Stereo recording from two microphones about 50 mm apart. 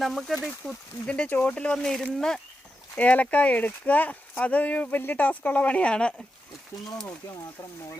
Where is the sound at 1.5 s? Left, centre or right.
Left.